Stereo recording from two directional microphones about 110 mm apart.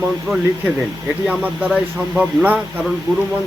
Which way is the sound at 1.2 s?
15° right (ahead or behind).